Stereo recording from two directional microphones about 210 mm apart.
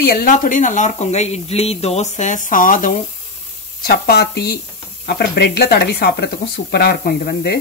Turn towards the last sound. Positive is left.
turn(degrees=50)  # may be behind; listen again after turning